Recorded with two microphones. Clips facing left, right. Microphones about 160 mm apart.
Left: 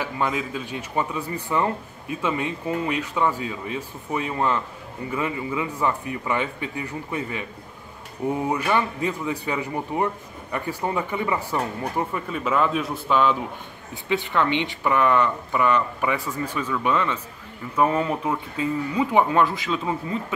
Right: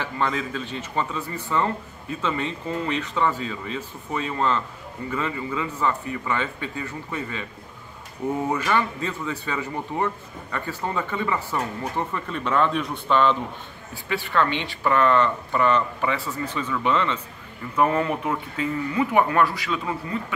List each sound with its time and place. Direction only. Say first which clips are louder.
0.0 s speech: left 1 dB; 10° left (ahead or behind)
8.5 s speech: even; 15° left (ahead or behind)
14.0 s speech: left 1 dB; 20° left (ahead or behind)
18.9 s speech: left 1 dB; 20° left (ahead or behind)